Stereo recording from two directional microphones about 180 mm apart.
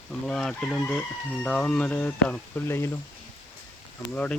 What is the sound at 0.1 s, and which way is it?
Speech, 5° left (ahead or behind).